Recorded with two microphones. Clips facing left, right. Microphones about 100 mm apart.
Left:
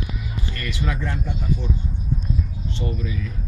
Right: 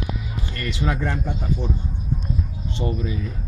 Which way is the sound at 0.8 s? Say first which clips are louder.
Right 4 dB; 40° right (ahead or behind).